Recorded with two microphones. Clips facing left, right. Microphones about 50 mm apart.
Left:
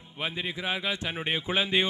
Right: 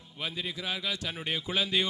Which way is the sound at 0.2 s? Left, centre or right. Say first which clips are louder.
Left 3 dB; left.